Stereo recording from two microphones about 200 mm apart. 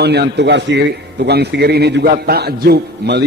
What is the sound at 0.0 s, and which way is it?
A man's voice, 55° right (ahead or behind).